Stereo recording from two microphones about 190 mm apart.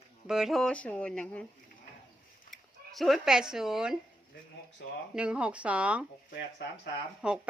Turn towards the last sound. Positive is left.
turn(degrees=-5)  # may be behind; listen again after turning